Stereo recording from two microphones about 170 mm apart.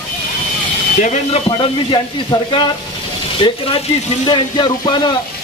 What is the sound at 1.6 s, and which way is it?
Speech, 25° left (ahead or behind).